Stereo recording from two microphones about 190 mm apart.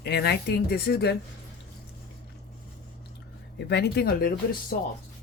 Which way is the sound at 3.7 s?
60° left (ahead or behind).